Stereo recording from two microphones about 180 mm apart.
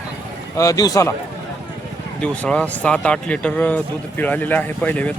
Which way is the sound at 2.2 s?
5° left (ahead or behind).